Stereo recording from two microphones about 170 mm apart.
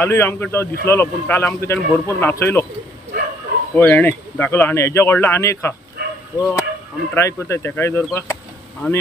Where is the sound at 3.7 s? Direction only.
10° left (ahead or behind).